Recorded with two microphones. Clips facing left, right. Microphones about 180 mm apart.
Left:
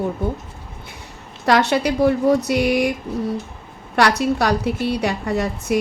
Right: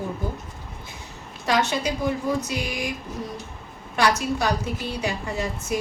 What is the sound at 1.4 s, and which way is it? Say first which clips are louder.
A woman's voice: left 6 dB; 65° left (ahead or behind).